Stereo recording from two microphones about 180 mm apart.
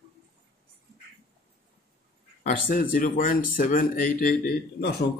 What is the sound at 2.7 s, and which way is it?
Speech, 50° left (ahead or behind).